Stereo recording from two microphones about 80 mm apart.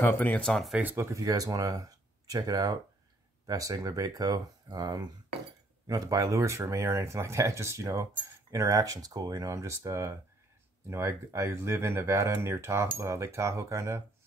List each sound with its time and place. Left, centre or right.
0.0 s speech: left
0.5 s speech: centre
0.9 s speech: right
5.9 s speech: right